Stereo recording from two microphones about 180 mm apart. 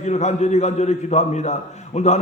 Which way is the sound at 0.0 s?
40° left (ahead or behind).